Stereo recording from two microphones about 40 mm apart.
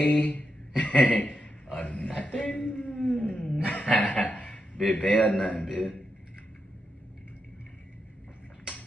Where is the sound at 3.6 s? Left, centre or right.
Left.